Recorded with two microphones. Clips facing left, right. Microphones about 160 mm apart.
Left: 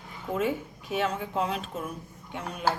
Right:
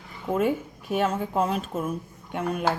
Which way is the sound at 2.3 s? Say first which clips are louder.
Right 8 dB; 55° right (ahead or behind).